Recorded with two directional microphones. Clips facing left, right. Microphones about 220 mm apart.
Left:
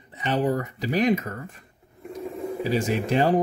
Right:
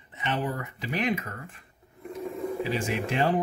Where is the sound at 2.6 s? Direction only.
40° left (ahead or behind).